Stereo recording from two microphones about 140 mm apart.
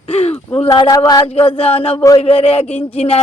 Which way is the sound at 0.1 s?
45° left (ahead or behind).